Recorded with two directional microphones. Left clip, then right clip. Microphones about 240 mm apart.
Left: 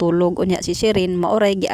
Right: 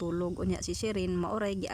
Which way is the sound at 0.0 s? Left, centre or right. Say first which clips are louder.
Left 16 dB; left.